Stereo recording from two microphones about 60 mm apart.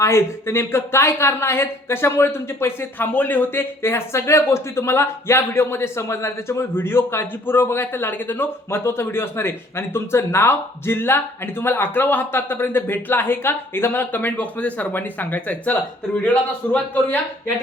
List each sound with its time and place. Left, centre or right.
0.0 s speech: left